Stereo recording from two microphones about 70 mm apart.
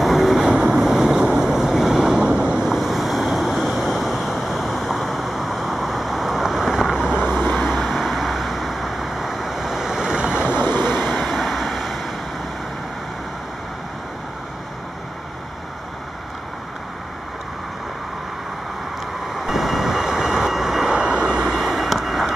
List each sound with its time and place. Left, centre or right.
0.0 s vehicle: centre
10.6 s waves: left
10.9 s vehicle: centre
19.3 s vehicle: centre